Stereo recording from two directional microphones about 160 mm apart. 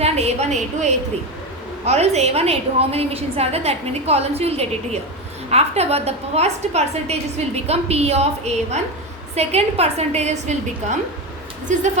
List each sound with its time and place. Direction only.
0.0 s a woman's voice: 40° right (ahead or behind)